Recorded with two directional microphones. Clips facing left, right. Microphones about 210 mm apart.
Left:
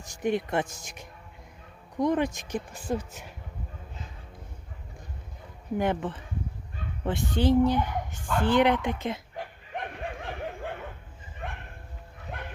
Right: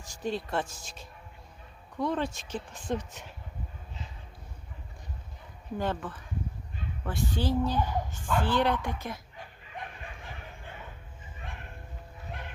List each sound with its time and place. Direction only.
0.0 s speech: 20° left (ahead or behind)
5.7 s a child's voice: 15° left (ahead or behind)
9.3 s a sound: 75° left (ahead or behind)